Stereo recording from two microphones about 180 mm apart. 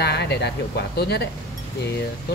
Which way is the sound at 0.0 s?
65° left (ahead or behind).